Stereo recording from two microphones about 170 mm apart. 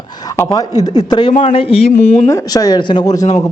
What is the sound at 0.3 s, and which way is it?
Speech, 20° left (ahead or behind).